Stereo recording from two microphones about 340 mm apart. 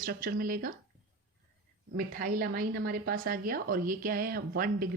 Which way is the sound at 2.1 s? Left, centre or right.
Right.